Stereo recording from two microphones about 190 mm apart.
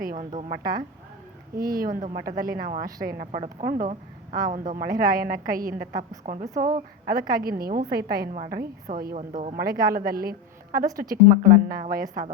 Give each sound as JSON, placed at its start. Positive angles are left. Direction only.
{"t": 0.0, "sound": "a woman's voice", "side_deg": -45}
{"t": 9.6, "sound": "a woman's voice", "side_deg": -50}